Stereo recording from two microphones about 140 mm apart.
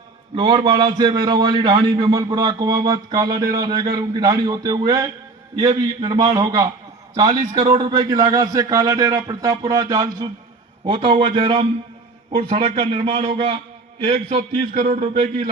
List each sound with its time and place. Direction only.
0.3 s a man's voice: 35° right (ahead or behind)